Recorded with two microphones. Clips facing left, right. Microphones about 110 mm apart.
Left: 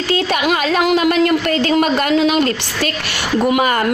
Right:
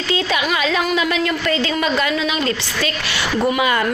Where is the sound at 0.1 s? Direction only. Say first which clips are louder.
Left 3 dB; 45° left (ahead or behind).